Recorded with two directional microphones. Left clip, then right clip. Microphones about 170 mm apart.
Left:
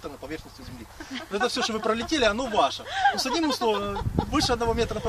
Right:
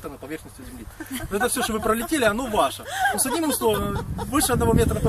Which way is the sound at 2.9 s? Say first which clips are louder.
Left 1 dB; 65° right (ahead or behind).